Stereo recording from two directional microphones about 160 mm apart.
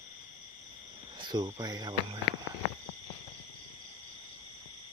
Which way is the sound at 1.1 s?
30° right (ahead or behind).